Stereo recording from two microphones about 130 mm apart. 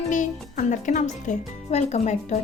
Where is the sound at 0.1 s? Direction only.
70° left (ahead or behind).